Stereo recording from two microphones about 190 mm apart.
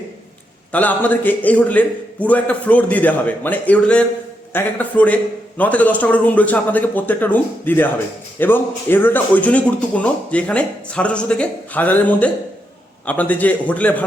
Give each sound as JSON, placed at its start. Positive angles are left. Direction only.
{"t": 0.7, "sound": "a man's voice", "side_deg": 10}